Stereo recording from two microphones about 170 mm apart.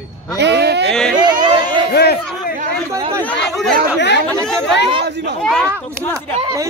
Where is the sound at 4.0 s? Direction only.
90° left.